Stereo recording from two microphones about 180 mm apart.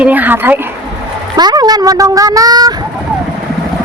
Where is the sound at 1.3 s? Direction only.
20° right (ahead or behind).